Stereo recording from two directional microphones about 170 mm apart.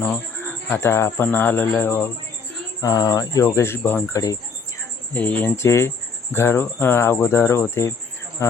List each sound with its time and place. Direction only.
0.0 s speech: 10° left (ahead or behind)
5.1 s speech: 10° left (ahead or behind)